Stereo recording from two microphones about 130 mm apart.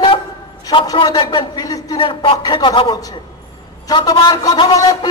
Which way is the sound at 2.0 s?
40° left (ahead or behind).